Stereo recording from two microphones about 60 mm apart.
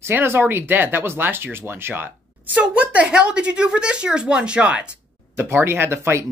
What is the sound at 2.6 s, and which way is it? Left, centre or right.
Speech, right.